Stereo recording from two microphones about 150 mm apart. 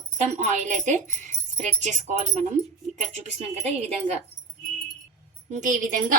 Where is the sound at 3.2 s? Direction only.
45° right (ahead or behind).